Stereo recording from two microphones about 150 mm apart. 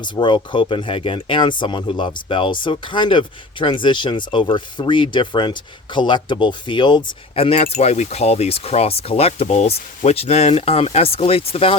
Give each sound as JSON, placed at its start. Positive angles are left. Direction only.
{"t": 0.2, "sound": "speech", "side_deg": 30}